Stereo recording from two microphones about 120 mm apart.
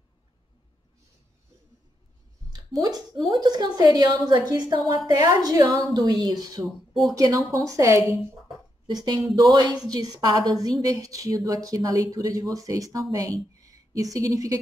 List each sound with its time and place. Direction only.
2.8 s a woman's voice: 35° right (ahead or behind)
9.0 s a woman's voice: 35° right (ahead or behind)
13.6 s a sound: 30° right (ahead or behind)
14.1 s a woman's voice: 30° right (ahead or behind)